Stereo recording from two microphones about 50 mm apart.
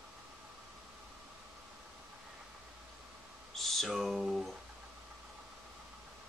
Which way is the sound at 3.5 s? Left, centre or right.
Centre.